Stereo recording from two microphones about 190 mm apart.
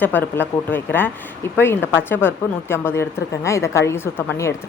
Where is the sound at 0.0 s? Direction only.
10° left (ahead or behind).